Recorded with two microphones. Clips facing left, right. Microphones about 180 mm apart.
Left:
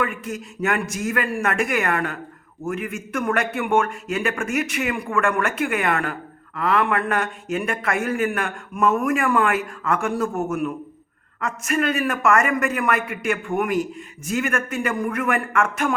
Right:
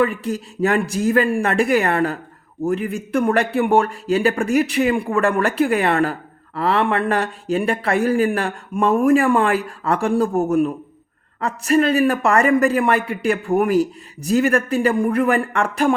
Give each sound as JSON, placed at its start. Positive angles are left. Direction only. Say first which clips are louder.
{"t": 0.0, "sound": "a man's voice", "louder": "right 6 dB", "side_deg": -35}